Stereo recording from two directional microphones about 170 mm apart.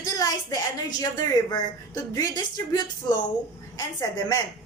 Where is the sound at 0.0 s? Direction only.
20° left (ahead or behind).